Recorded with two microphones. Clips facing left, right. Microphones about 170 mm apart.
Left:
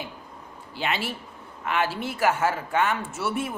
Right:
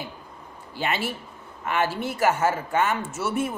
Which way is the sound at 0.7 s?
50° right (ahead or behind).